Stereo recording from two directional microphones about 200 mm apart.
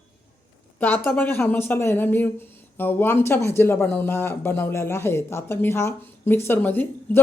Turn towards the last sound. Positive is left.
turn(degrees=10)  # may be behind; listen again after turning